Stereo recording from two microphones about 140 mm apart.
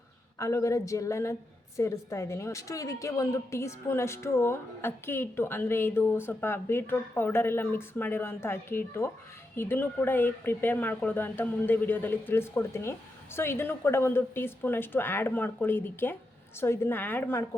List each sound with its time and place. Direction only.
0.3 s a woman's voice: 20° left (ahead or behind)